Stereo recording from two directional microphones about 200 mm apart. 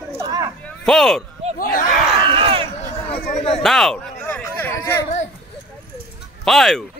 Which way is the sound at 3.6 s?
Centre (ahead or behind).